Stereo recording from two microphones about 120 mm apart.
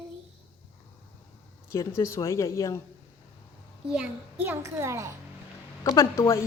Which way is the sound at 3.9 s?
10° right (ahead or behind).